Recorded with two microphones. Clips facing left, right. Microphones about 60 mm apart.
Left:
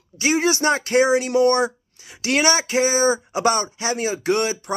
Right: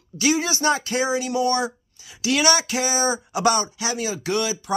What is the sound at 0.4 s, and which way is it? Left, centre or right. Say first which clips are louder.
Speech: left 3 dB; left.